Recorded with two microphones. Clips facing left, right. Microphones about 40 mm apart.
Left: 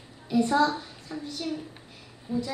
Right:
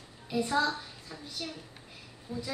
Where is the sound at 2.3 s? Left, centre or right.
Left.